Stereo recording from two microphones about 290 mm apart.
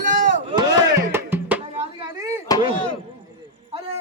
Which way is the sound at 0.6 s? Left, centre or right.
Centre.